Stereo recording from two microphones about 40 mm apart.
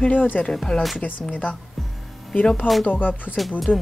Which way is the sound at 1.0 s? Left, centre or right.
Left.